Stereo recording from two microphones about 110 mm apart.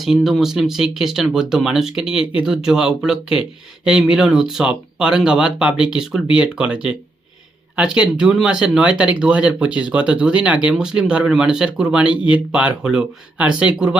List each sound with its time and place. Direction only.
0.0 s speech: centre (ahead or behind)
8.2 s speech: 10° right (ahead or behind)
12.0 s speech: 50° left (ahead or behind)
12.5 s speech: 10° right (ahead or behind)